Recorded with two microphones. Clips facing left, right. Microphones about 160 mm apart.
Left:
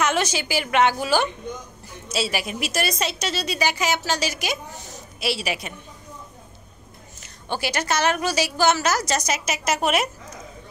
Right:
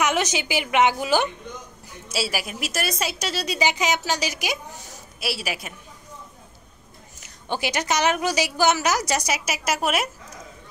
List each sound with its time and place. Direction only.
0.0 s a woman's voice: 15° right (ahead or behind)
2.0 s a woman's voice: 5° right (ahead or behind)
3.5 s a woman's voice: 20° right (ahead or behind)
5.2 s a woman's voice: 5° right (ahead or behind)
7.2 s a woman's voice: 15° right (ahead or behind)